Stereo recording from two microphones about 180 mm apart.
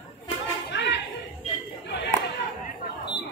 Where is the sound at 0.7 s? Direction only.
75° left (ahead or behind).